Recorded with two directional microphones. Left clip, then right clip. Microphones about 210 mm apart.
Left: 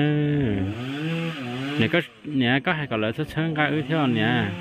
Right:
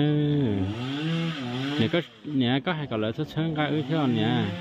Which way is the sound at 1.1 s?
40° left (ahead or behind).